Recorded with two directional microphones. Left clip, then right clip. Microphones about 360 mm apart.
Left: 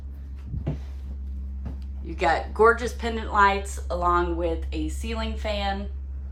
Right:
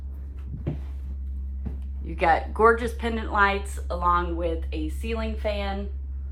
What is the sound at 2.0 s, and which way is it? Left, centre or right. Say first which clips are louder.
A woman's voice: right 2 dB; centre.